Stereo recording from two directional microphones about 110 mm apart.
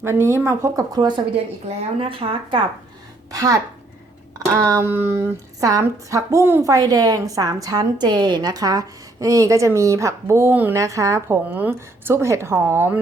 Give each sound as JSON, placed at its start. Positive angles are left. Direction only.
{"t": 0.0, "sound": "speech", "side_deg": -25}
{"t": 0.9, "sound": "speech", "side_deg": -40}
{"t": 1.6, "sound": "speech", "side_deg": -55}
{"t": 3.3, "sound": "speech", "side_deg": -30}
{"t": 4.6, "sound": "speech", "side_deg": -25}
{"t": 10.8, "sound": "speech", "side_deg": -30}
{"t": 11.4, "sound": "speech", "side_deg": -15}